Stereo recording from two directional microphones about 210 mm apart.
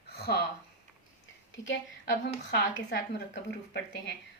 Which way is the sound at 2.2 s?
50° left (ahead or behind).